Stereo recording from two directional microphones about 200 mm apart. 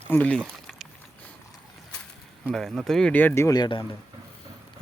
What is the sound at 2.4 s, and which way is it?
Speech, centre (ahead or behind).